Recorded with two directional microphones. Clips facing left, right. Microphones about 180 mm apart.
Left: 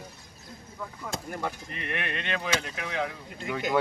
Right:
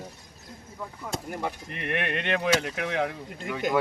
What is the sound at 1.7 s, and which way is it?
Speech, 60° right (ahead or behind).